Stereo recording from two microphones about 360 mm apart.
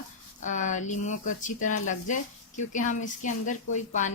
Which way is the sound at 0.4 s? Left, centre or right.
Left.